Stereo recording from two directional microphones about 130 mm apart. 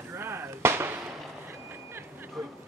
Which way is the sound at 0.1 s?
15° right (ahead or behind).